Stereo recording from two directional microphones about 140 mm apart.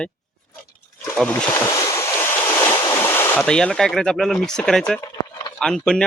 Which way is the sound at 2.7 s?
20° left (ahead or behind).